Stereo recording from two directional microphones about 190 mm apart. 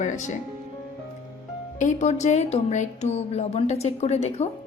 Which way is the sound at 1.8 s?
40° left (ahead or behind).